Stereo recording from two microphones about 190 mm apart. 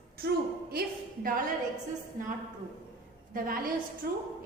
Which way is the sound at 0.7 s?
50° right (ahead or behind).